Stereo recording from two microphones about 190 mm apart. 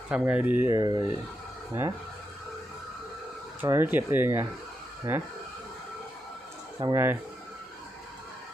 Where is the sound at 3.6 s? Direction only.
10° right (ahead or behind).